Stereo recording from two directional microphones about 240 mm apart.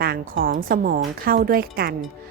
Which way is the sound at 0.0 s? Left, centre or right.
Right.